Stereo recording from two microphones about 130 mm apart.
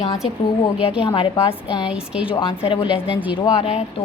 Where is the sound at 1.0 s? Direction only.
45° left (ahead or behind).